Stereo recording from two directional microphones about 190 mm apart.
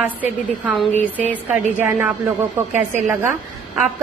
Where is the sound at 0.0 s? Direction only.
10° right (ahead or behind).